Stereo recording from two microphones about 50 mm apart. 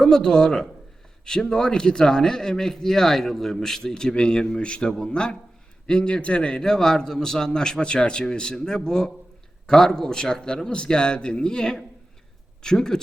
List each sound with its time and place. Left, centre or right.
0.0 s a man's voice: centre